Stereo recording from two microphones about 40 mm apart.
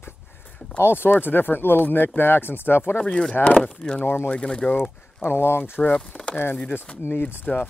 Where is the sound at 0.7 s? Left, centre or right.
Left.